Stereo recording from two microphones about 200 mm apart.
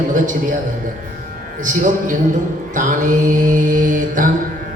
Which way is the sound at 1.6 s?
40° right (ahead or behind).